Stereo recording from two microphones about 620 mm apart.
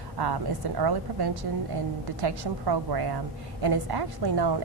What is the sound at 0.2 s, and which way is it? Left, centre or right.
A woman's voice, right.